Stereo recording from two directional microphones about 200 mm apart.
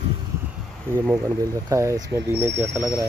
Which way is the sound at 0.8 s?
10° right (ahead or behind).